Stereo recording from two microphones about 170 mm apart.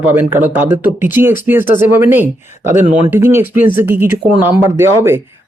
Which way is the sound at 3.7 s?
10° right (ahead or behind).